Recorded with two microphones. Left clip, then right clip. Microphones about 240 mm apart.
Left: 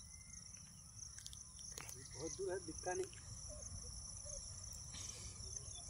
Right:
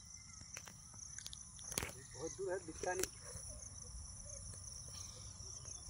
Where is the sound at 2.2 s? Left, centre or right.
Right.